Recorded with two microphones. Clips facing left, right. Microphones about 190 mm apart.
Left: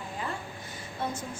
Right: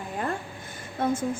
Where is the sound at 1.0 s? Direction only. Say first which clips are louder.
Right 8 dB; 50° right (ahead or behind).